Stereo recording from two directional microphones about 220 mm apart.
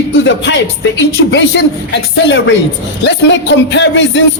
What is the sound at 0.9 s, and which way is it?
Speech, 55° left (ahead or behind).